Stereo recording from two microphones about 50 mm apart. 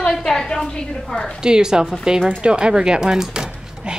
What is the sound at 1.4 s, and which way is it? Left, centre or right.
Speech, centre.